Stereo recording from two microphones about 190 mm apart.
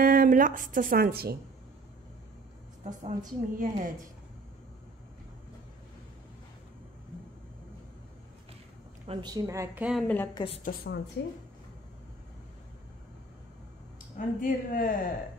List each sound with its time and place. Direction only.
0.0 s a woman's voice: 50° right (ahead or behind)
2.8 s a woman's voice: 40° right (ahead or behind)
9.0 s a woman's voice: 25° right (ahead or behind)
9.8 s a woman's voice: centre (ahead or behind)
10.1 s a woman's voice: 10° left (ahead or behind)
10.6 s speech: 55° left (ahead or behind)
14.1 s speech: 45° left (ahead or behind)